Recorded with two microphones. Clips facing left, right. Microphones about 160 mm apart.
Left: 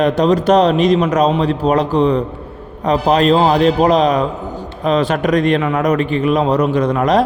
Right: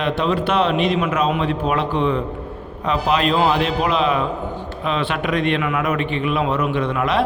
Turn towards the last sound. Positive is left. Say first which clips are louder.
# left 6 dB
turn(degrees=40)  # may be behind; listen again after turning